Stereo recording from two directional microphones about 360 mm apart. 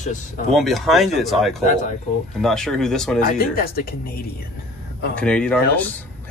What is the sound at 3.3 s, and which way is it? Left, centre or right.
Speech, left.